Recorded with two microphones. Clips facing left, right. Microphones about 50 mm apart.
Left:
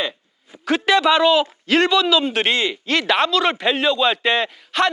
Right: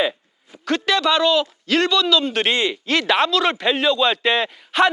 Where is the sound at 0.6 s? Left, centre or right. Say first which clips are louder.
Left 3 dB; centre.